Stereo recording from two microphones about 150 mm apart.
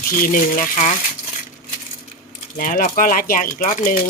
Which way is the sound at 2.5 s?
65° left (ahead or behind).